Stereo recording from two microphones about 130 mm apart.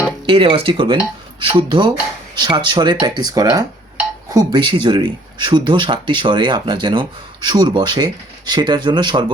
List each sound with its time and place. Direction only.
0.3 s speech: 45° right (ahead or behind)